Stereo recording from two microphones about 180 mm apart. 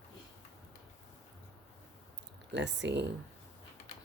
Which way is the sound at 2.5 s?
75° right (ahead or behind).